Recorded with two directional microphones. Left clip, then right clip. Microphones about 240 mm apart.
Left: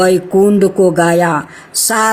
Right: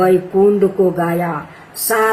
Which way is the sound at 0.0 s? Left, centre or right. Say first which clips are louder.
Left 2 dB; left.